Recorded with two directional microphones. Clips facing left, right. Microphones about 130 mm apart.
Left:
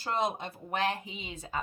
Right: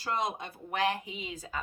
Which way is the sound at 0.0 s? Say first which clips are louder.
Left 2 dB; 25° left (ahead or behind).